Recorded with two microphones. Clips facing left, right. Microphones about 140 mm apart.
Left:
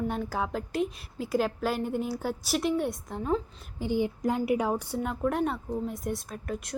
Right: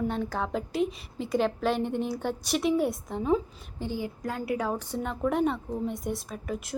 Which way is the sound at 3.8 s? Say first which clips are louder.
Left 5 dB; 20° left (ahead or behind).